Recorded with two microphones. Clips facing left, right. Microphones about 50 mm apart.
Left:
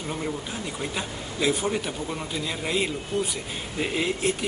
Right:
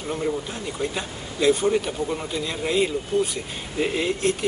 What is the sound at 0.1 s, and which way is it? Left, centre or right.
Speech, centre.